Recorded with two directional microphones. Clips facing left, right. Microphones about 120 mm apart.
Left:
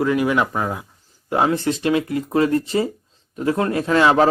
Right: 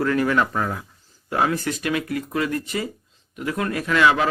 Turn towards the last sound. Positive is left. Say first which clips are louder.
# left 3 dB
turn(degrees=30)  # may be behind; listen again after turning